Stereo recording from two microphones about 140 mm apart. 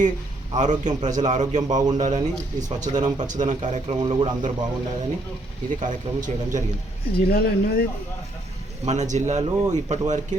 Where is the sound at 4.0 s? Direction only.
30° right (ahead or behind).